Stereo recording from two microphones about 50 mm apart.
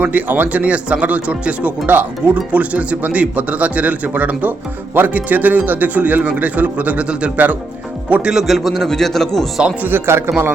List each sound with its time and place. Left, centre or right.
0.0 s speech: right
8.3 s a man's voice: centre
10.1 s a man's voice: right